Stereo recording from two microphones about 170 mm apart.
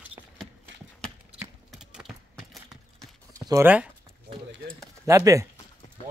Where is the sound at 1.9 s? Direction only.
Centre (ahead or behind).